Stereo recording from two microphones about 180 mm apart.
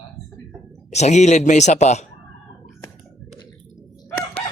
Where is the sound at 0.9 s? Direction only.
40° left (ahead or behind).